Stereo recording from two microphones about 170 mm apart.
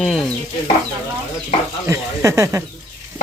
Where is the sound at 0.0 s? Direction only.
5° left (ahead or behind).